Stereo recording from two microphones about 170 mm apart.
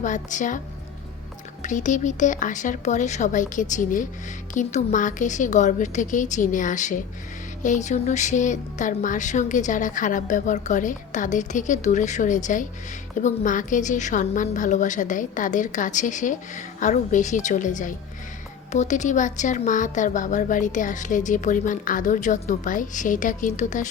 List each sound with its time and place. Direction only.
0.0 s a woman's voice: 45° left (ahead or behind)
1.6 s a woman's voice: 45° left (ahead or behind)